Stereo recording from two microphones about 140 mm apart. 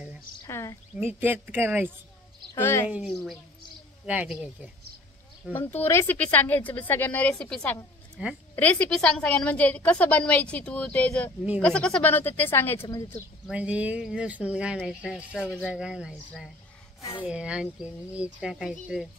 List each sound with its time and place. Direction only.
0.5 s a sound: 20° left (ahead or behind)
0.9 s speech: 15° right (ahead or behind)
2.5 s a woman's voice: 20° left (ahead or behind)
2.9 s speech: centre (ahead or behind)
5.7 s a woman's voice: 15° left (ahead or behind)
8.2 s speech: 10° right (ahead or behind)
8.5 s a woman's voice: 10° left (ahead or behind)
13.5 s speech: 10° right (ahead or behind)